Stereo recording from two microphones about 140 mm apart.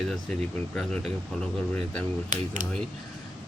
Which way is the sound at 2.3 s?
65° right (ahead or behind).